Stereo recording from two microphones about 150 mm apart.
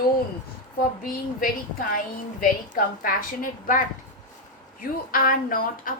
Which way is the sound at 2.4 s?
65° left (ahead or behind).